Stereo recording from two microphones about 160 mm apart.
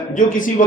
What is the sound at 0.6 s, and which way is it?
Speech, 55° left (ahead or behind).